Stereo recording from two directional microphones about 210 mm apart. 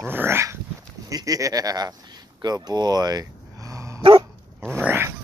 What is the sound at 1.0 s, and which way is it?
Speech, 15° right (ahead or behind).